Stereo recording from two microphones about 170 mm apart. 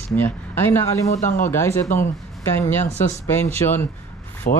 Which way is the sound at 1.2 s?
50° left (ahead or behind).